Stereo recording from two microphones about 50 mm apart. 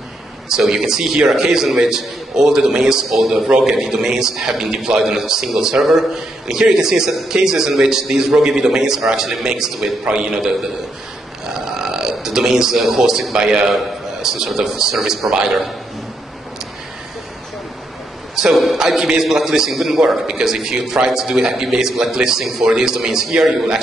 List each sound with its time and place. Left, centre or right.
0.5 s a man's voice: centre
18.3 s a man's voice: centre